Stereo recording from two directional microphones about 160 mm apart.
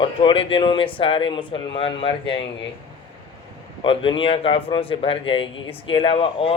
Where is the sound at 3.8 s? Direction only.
35° left (ahead or behind).